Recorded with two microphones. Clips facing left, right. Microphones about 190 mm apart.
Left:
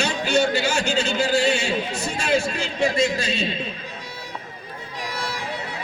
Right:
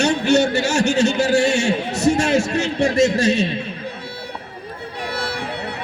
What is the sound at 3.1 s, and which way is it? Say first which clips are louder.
Speech: right 8 dB; 75° right (ahead or behind).